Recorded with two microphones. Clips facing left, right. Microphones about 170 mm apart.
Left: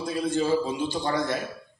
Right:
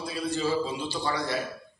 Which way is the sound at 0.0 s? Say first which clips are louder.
Left 4 dB; 50° left (ahead or behind).